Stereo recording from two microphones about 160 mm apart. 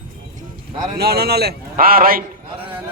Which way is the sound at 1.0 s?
85° right.